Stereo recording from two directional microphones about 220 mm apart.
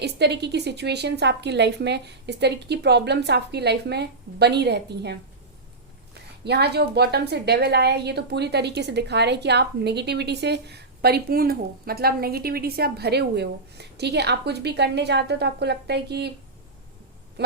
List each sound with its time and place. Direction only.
0.0 s a woman's voice: 50° right (ahead or behind)
6.4 s a woman's voice: 50° right (ahead or behind)